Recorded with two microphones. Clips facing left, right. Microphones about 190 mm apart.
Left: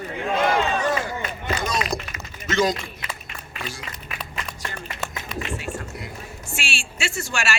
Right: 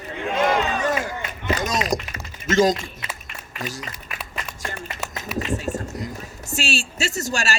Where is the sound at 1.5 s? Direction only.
40° right (ahead or behind).